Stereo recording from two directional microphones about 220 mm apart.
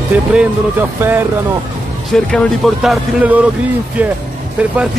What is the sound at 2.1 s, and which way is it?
Speech, centre (ahead or behind).